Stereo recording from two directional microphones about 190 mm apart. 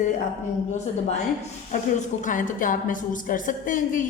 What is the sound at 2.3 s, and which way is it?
A woman's voice, 45° left (ahead or behind).